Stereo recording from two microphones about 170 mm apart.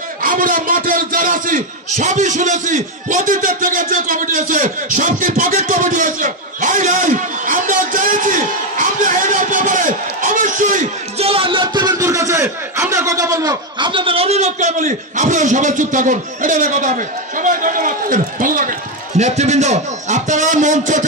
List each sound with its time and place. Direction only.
0.2 s a man's voice: 55° right (ahead or behind)